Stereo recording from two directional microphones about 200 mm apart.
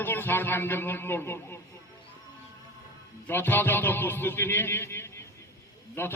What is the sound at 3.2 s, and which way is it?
A man's voice, 10° left (ahead or behind).